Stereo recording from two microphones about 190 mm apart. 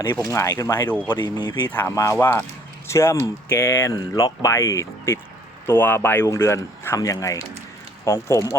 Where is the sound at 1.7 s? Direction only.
10° left (ahead or behind).